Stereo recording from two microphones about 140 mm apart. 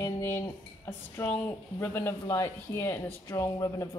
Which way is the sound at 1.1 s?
10° left (ahead or behind).